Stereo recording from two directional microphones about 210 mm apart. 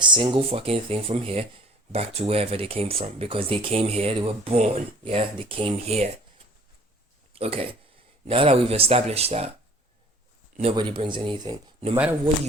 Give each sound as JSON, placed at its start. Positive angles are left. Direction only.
{"t": 0.0, "sound": "speech", "side_deg": -25}
{"t": 7.3, "sound": "speech", "side_deg": -30}
{"t": 10.6, "sound": "speech", "side_deg": -25}